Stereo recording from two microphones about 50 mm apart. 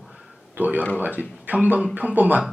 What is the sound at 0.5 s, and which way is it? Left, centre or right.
Speech, right.